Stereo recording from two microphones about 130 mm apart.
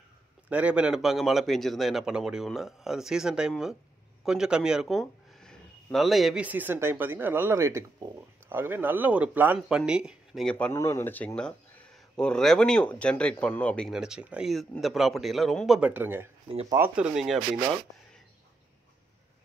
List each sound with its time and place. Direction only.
0.5 s a man's voice: 10° right (ahead or behind)
6.4 s speech: 15° right (ahead or behind)
10.4 s speech: 10° left (ahead or behind)
10.7 s speech: 20° left (ahead or behind)
13.9 s a man's voice: 5° right (ahead or behind)
15.9 s a man's voice: 15° right (ahead or behind)